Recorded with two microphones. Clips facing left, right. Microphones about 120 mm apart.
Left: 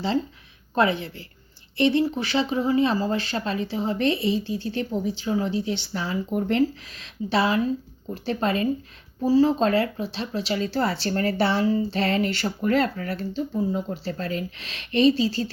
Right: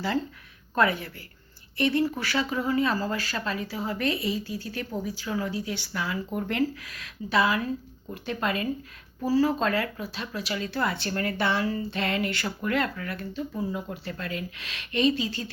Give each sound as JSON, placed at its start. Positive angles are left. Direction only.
{"t": 0.8, "sound": "speech", "side_deg": 25}